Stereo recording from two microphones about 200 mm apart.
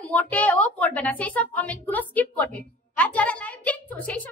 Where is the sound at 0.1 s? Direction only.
5° left (ahead or behind).